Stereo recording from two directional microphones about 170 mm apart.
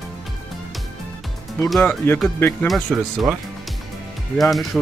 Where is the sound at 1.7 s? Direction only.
5° left (ahead or behind).